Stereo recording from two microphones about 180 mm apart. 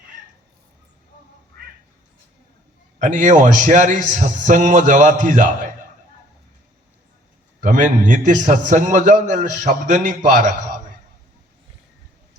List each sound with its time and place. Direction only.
3.0 s a man's voice: 45° right (ahead or behind)
7.6 s a man's voice: 45° right (ahead or behind)